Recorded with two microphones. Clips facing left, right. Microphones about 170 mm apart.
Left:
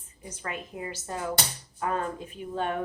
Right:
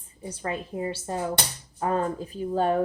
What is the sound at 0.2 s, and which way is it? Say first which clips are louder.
Speech: right 5 dB; 30° right (ahead or behind).